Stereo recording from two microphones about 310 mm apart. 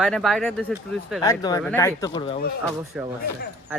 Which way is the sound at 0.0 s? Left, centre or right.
Centre.